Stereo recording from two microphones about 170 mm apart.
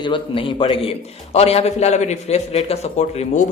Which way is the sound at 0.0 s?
30° left (ahead or behind).